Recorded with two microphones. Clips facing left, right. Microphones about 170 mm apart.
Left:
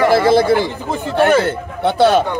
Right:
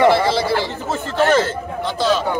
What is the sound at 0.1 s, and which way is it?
A man's voice, 50° left (ahead or behind).